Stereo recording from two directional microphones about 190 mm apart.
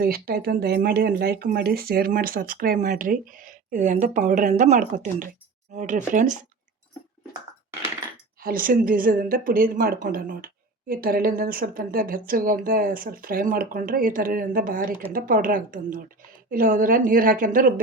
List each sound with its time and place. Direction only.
0.0 s speech: 55° right (ahead or behind)
8.4 s speech: 50° right (ahead or behind)